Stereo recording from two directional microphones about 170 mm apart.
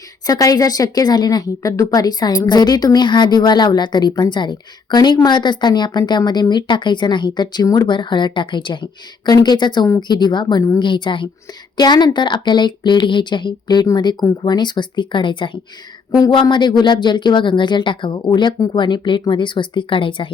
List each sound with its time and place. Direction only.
0.3 s a woman's voice: 20° left (ahead or behind)